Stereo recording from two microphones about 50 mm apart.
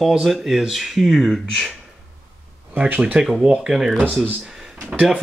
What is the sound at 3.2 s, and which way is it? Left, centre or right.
Speech, centre.